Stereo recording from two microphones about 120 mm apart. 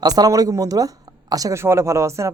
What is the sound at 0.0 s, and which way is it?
Speech, 30° right (ahead or behind).